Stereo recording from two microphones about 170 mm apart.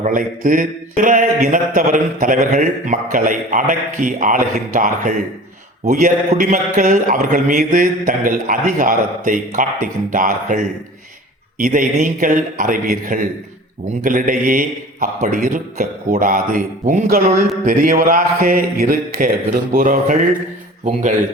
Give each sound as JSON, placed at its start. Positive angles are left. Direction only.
{"t": 0.0, "sound": "speech", "side_deg": -50}
{"t": 11.6, "sound": "speech", "side_deg": -50}